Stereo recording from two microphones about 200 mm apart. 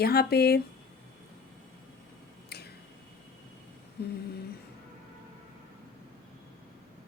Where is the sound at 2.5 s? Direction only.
55° left (ahead or behind).